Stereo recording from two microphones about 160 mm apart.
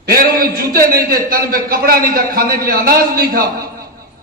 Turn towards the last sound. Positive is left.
turn(degrees=-65)  # may be behind; listen again after turning